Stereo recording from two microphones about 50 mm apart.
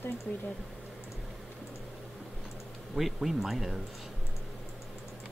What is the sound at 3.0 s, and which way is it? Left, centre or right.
Speech, centre.